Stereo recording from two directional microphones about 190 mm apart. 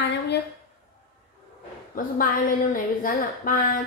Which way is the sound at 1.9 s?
50° left (ahead or behind).